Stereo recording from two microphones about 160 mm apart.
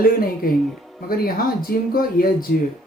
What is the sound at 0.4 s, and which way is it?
Speech, 65° left (ahead or behind).